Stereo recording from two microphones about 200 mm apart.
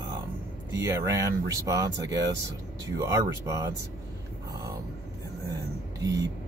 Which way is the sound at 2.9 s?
15° right (ahead or behind).